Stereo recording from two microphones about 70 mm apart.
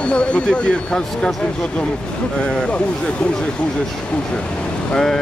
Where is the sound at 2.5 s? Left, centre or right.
Centre.